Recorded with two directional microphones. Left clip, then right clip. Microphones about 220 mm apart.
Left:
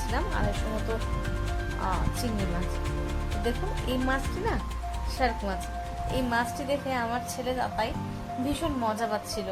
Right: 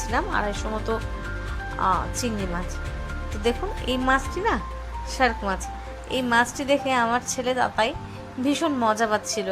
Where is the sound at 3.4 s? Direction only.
15° right (ahead or behind).